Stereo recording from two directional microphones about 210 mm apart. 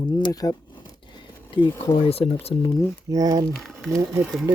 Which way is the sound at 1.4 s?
25° left (ahead or behind).